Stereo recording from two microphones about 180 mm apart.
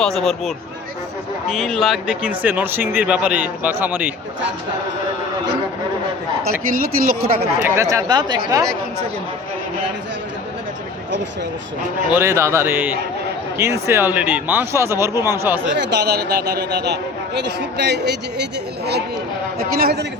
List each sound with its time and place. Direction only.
0.0 s speech: centre (ahead or behind)
6.8 s speech: 55° right (ahead or behind)
7.6 s speech: 15° right (ahead or behind)
12.1 s speech: 15° right (ahead or behind)
15.7 s speech: 70° right (ahead or behind)
19.5 s a man's voice: 60° right (ahead or behind)